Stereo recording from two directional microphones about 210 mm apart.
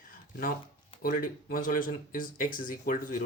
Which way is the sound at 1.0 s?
40° left (ahead or behind).